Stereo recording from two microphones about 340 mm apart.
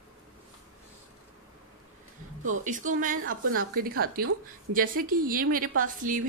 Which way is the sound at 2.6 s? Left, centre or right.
Right.